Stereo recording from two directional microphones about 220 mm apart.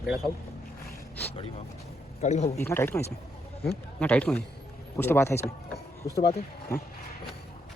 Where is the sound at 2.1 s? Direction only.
30° left (ahead or behind).